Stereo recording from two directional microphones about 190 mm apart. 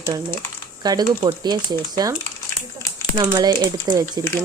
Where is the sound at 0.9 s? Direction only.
20° right (ahead or behind).